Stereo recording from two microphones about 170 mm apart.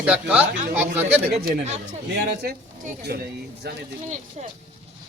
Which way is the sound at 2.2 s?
70° right (ahead or behind).